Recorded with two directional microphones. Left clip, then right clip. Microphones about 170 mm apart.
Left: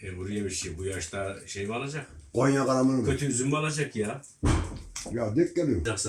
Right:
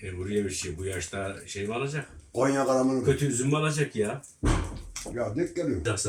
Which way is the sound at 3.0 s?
15° right (ahead or behind).